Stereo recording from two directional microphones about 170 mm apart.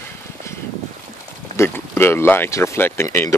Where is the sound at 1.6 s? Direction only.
15° left (ahead or behind).